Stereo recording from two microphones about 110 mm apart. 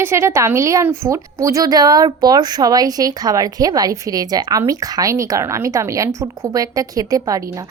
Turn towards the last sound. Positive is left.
turn(degrees=-30)  # may be behind; listen again after turning